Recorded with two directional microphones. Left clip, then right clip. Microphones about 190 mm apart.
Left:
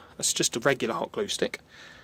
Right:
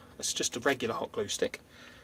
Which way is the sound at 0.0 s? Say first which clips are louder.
Left 6 dB; 50° left (ahead or behind).